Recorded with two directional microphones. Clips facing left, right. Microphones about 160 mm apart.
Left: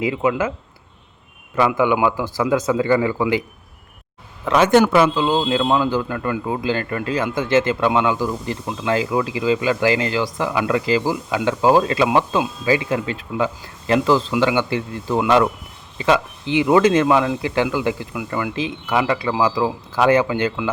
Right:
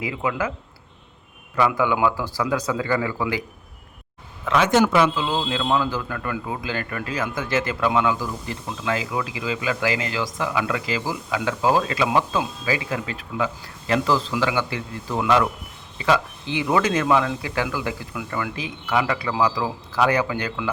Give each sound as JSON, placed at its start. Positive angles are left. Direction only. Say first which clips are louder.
{"t": 0.0, "sound": "a man's voice", "louder": "left 6 dB", "side_deg": 25}
{"t": 1.5, "sound": "a man's voice", "louder": "left 3 dB", "side_deg": 20}
{"t": 4.4, "sound": "a man's voice", "louder": "left 4 dB", "side_deg": 45}
{"t": 16.0, "sound": "a man's voice", "louder": "left 3 dB", "side_deg": 20}